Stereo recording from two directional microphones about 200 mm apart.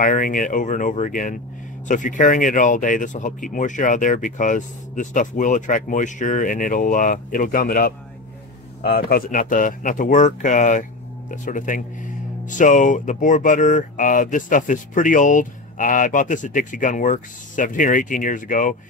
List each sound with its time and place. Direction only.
0.0 s speech: 40° left (ahead or behind)